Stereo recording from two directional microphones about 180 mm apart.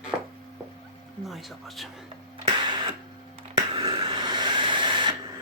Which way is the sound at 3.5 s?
25° right (ahead or behind).